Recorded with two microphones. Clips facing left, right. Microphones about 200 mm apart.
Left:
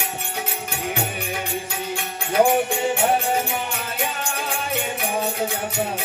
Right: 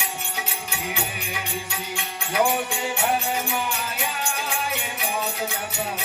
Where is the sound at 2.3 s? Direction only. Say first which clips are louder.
Left 5 dB; 50° left (ahead or behind).